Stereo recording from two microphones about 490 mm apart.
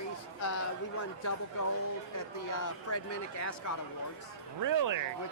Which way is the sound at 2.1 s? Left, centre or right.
Left.